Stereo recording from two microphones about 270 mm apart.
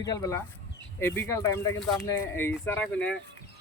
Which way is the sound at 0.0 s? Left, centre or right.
Centre.